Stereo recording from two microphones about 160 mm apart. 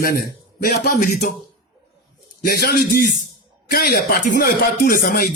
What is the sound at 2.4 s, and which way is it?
A man's voice, 70° left (ahead or behind).